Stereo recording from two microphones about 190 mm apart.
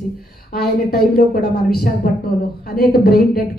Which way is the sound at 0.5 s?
55° left (ahead or behind).